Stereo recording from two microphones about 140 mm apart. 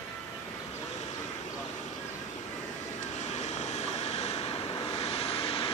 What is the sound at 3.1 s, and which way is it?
Vehicle, 55° left (ahead or behind).